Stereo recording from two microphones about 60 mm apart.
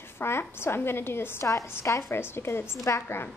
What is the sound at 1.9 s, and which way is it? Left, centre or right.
Speech, left.